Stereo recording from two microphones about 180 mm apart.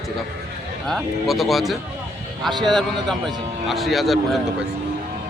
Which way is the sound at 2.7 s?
Centre (ahead or behind).